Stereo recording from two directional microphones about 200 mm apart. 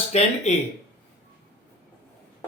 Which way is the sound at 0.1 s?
30° left (ahead or behind).